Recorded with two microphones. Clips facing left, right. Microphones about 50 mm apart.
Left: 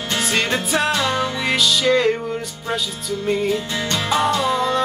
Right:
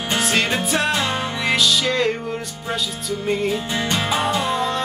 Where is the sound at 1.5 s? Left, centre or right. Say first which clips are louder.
Left 2 dB; centre.